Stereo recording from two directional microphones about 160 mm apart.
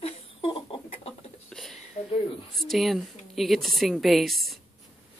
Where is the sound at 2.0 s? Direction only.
40° left (ahead or behind).